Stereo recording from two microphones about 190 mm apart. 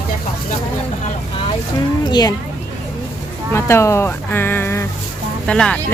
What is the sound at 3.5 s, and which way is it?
Speech, 15° left (ahead or behind).